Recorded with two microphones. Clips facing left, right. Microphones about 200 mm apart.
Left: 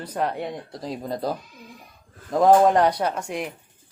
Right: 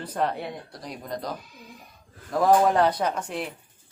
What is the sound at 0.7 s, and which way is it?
Speech, 25° left (ahead or behind).